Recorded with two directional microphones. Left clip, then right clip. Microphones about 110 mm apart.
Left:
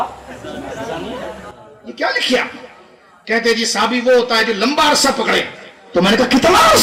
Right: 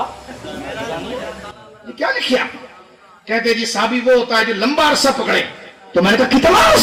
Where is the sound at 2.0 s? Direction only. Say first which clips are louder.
Left 1 dB; 40° left (ahead or behind).